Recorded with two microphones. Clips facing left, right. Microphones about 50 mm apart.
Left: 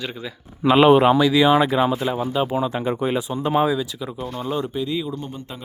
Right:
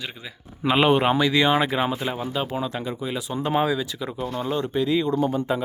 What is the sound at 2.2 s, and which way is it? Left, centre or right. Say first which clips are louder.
Speech: left 5 dB; centre.